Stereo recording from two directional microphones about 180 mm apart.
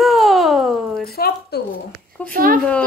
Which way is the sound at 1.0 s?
60° left (ahead or behind).